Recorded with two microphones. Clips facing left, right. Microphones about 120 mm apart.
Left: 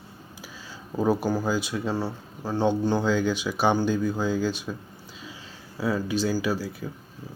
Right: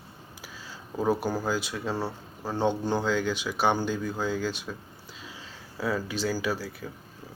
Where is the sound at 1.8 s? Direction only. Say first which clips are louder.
Left 3 dB; 5° left (ahead or behind).